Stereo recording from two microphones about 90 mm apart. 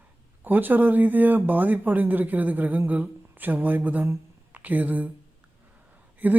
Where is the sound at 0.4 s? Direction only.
20° right (ahead or behind).